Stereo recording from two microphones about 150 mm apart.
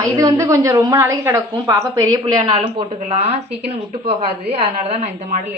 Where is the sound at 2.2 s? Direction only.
35° right (ahead or behind).